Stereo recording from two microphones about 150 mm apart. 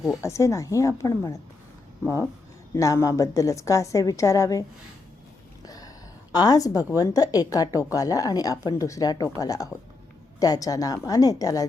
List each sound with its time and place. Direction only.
0.2 s a woman's voice: 20° left (ahead or behind)
2.7 s a woman's voice: 20° left (ahead or behind)
5.6 s a sound: 25° left (ahead or behind)
6.3 s a woman's voice: 25° left (ahead or behind)